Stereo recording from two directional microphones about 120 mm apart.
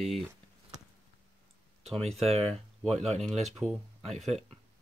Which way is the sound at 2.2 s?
60° right (ahead or behind).